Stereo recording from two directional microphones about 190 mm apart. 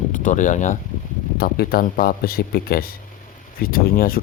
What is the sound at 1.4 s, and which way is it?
Speech, 55° left (ahead or behind).